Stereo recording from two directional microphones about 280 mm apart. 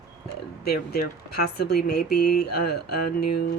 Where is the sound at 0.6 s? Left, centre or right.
Left.